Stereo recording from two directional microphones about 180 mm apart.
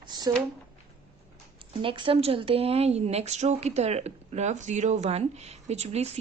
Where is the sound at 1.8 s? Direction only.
30° right (ahead or behind).